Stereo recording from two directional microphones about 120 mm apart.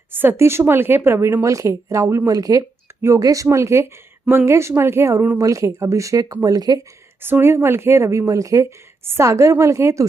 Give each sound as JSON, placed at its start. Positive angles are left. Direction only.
{"t": 0.1, "sound": "speech", "side_deg": -15}
{"t": 7.2, "sound": "speech", "side_deg": -20}